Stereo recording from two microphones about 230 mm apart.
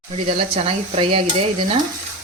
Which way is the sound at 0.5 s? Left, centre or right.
Right.